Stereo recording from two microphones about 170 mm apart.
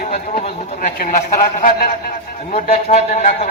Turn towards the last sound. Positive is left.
turn(degrees=45)  # may be behind; listen again after turning